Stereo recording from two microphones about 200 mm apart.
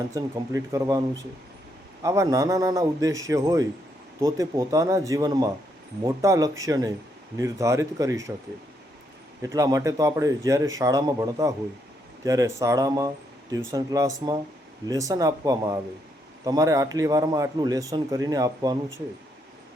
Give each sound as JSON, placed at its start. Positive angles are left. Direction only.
{"t": 0.1, "sound": "a man's voice", "side_deg": -15}
{"t": 2.0, "sound": "a man's voice", "side_deg": -15}
{"t": 9.4, "sound": "a man's voice", "side_deg": -15}